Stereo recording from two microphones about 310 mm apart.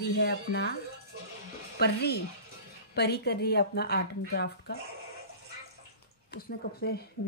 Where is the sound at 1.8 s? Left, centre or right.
Left.